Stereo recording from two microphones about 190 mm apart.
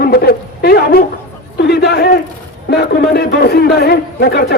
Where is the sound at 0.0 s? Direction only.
55° left (ahead or behind).